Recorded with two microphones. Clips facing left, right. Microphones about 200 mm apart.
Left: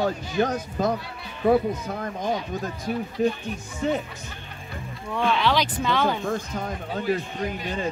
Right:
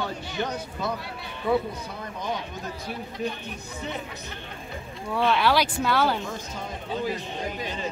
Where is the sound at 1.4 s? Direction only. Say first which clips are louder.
Left 5 dB; 45° left (ahead or behind).